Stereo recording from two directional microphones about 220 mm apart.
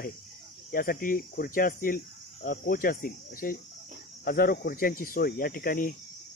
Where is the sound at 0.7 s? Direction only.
40° left (ahead or behind).